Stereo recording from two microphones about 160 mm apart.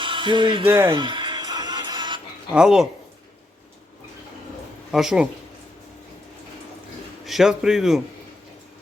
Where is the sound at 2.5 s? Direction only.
5° right (ahead or behind).